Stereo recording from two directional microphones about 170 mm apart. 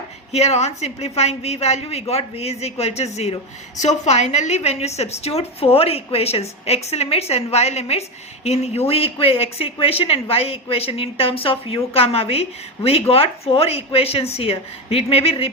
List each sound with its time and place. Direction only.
0.3 s a woman's voice: 40° left (ahead or behind)